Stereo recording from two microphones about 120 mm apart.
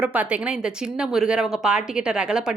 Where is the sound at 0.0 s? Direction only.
10° right (ahead or behind).